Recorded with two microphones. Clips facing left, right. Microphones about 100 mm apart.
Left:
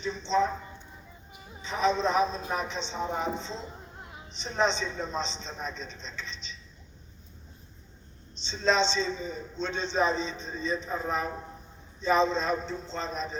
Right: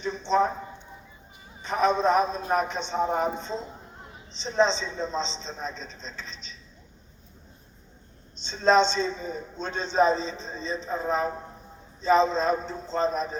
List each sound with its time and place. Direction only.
0.0 s a man's voice: 50° right (ahead or behind)
1.6 s a man's voice: 50° right (ahead or behind)
4.6 s a man's voice: 30° right (ahead or behind)
8.4 s a man's voice: 45° right (ahead or behind)